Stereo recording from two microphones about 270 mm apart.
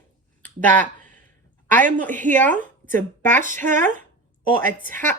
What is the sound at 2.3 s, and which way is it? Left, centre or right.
Speech, centre.